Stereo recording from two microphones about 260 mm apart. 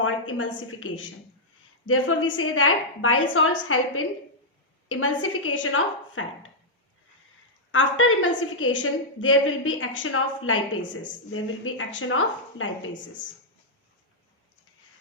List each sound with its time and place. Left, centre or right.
0.0 s a woman's voice: left
7.7 s a woman's voice: left